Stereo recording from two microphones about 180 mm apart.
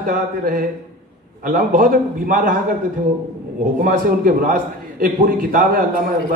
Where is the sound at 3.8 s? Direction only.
50° right (ahead or behind).